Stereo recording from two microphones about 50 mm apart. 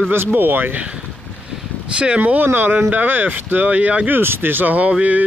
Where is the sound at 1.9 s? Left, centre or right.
Right.